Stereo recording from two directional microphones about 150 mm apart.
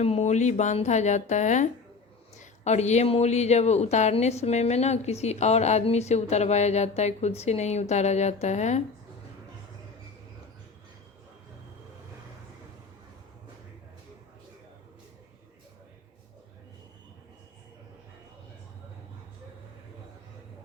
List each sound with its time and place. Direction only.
0.0 s speech: 45° left (ahead or behind)